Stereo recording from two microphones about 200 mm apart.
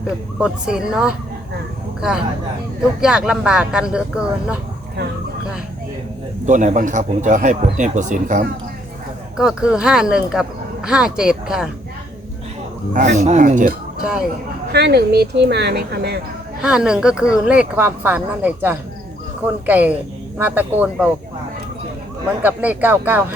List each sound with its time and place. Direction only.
0.3 s speech: 5° right (ahead or behind)
6.4 s speech: 40° right (ahead or behind)
9.4 s speech: 5° right (ahead or behind)
12.9 s speech: 35° right (ahead or behind)
14.0 s speech: 5° right (ahead or behind)
14.7 s speech: 55° right (ahead or behind)
16.6 s speech: 5° right (ahead or behind)
22.4 s speech: 10° right (ahead or behind)